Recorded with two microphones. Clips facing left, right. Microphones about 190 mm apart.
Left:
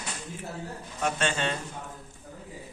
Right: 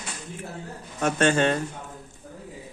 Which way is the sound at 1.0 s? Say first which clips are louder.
Right 7 dB; 50° right (ahead or behind).